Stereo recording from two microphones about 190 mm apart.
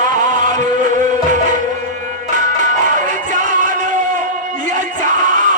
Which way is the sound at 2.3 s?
40° right (ahead or behind).